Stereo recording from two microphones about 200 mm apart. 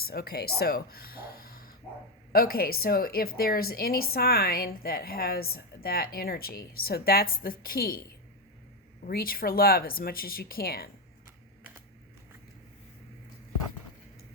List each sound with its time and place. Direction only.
0.0 s a woman's voice: 50° left (ahead or behind)
9.0 s a woman's voice: 45° left (ahead or behind)